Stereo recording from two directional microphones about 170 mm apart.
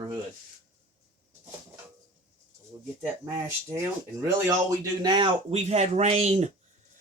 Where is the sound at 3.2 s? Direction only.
15° right (ahead or behind); by 6.5 s 40° right (ahead or behind).